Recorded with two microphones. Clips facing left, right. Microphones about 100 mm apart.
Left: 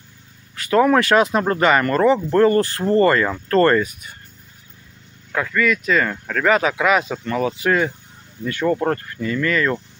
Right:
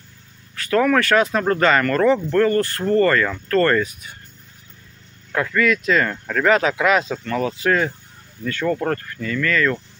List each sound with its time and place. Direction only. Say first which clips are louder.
0.6 s speech: left 2 dB; 20° left (ahead or behind)
2.3 s speech: left 2 dB; 20° left (ahead or behind)
3.7 s speech: left 2 dB; 5° left (ahead or behind)
5.3 s speech: right 1 dB; centre (ahead or behind); by 9.8 s 15° left (ahead or behind)